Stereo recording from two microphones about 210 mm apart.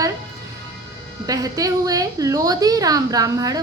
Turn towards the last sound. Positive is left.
turn(degrees=-15)  # may be behind; listen again after turning